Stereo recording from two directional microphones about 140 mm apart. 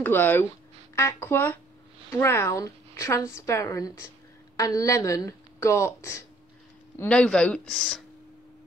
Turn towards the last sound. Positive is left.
turn(degrees=5)  # may be behind; listen again after turning